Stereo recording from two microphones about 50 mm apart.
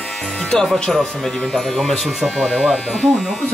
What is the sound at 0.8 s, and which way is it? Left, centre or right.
Speech, centre.